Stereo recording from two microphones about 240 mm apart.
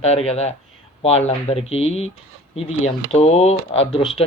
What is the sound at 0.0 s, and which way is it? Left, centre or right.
Speech, left.